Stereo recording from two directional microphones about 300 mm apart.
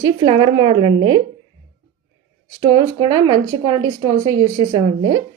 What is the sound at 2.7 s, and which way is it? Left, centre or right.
Speech, centre.